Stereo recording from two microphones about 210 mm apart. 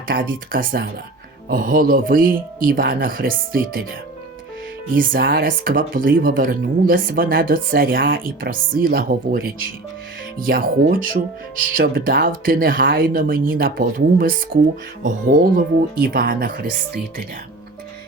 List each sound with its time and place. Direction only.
0.1 s speech: 40° right (ahead or behind)
5.2 s speech: 45° right (ahead or behind)